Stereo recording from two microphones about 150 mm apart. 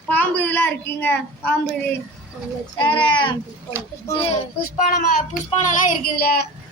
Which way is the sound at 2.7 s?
30° left (ahead or behind).